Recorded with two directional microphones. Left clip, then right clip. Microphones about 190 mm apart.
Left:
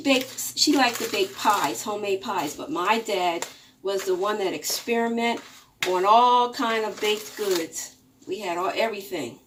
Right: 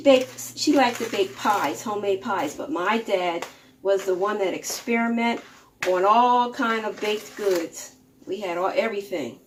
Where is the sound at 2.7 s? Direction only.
5° right (ahead or behind).